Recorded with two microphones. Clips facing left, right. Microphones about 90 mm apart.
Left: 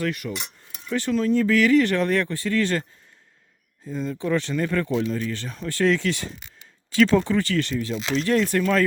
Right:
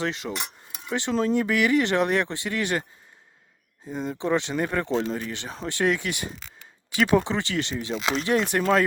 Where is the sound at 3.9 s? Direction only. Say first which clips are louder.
Left 1 dB; 30° right (ahead or behind).